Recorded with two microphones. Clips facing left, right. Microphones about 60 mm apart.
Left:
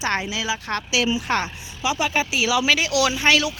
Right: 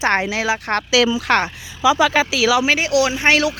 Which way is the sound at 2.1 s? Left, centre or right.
Right.